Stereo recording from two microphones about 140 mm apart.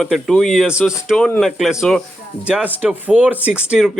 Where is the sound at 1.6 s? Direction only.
5° right (ahead or behind).